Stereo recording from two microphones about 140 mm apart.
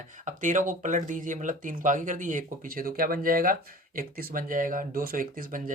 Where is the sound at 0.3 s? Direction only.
65° right (ahead or behind).